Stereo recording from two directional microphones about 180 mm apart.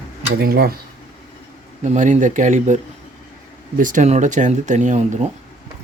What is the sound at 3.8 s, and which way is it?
Speech, 45° right (ahead or behind).